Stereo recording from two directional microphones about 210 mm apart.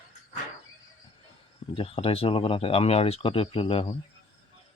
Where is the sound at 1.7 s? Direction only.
30° left (ahead or behind).